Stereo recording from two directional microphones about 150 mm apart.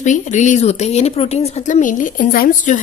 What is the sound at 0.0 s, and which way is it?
Speech, 55° left (ahead or behind).